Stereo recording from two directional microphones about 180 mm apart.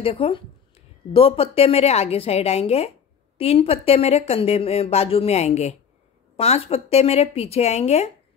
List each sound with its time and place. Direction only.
0.0 s speech: 30° left (ahead or behind)